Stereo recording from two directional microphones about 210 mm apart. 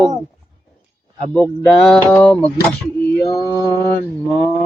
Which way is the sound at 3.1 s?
15° left (ahead or behind).